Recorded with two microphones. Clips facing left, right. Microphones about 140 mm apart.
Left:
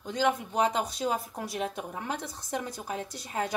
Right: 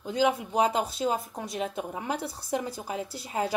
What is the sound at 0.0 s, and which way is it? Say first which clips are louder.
A woman's voice: right 2 dB; 5° right (ahead or behind).